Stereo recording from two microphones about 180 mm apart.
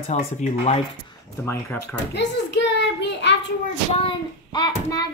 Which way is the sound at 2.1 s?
75° left (ahead or behind).